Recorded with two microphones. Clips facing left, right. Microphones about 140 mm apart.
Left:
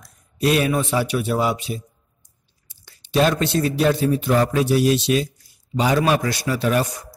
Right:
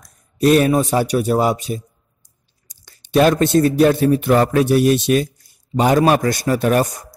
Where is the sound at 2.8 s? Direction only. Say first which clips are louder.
Right 5 dB; 50° right (ahead or behind).